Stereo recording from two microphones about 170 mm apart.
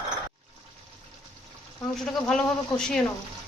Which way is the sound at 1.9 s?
Centre (ahead or behind).